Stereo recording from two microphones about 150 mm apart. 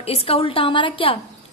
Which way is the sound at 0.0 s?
40° left (ahead or behind).